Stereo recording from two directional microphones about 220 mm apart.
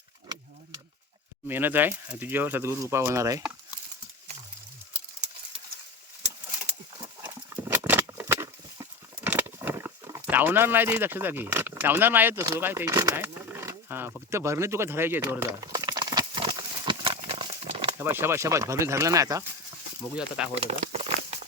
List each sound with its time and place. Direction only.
1.5 s speech: 10° right (ahead or behind)
7.0 s horse: 15° right (ahead or behind)
18.0 s speech: 10° right (ahead or behind)
20.1 s speech: 5° right (ahead or behind)
20.6 s crumpling: 30° right (ahead or behind)